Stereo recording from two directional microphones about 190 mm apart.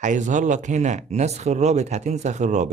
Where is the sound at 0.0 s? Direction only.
40° right (ahead or behind).